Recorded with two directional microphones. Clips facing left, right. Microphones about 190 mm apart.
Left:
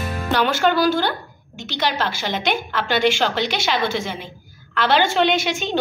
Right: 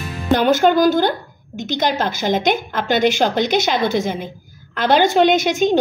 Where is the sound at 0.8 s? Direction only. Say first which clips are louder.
Right 4 dB; 45° right (ahead or behind).